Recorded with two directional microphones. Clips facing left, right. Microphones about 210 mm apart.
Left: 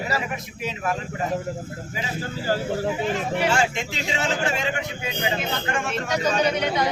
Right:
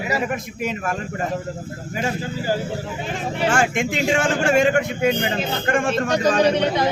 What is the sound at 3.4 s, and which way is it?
Speech, 50° right (ahead or behind).